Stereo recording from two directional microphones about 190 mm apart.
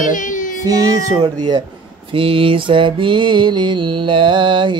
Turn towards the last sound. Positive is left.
turn(degrees=-25)  # may be behind; listen again after turning